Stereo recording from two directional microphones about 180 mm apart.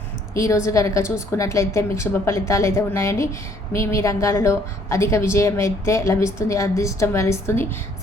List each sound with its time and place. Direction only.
0.3 s a woman's voice: 15° left (ahead or behind)